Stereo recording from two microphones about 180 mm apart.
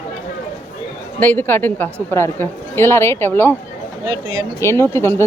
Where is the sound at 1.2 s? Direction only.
10° left (ahead or behind).